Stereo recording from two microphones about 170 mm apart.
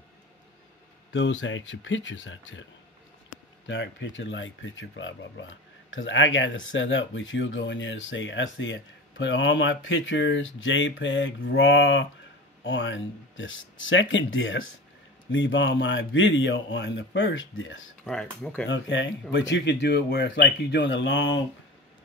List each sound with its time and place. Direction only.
1.1 s speech: 90° left
3.6 s speech: 90° left
18.0 s speech: 5° left (ahead or behind)
18.7 s speech: 90° left